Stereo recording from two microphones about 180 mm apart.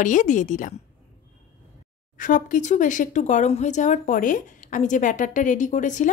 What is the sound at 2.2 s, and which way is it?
A woman's voice, 45° left (ahead or behind).